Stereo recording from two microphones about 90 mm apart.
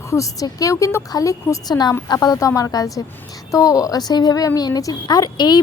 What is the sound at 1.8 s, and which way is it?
A woman's voice, 50° left (ahead or behind).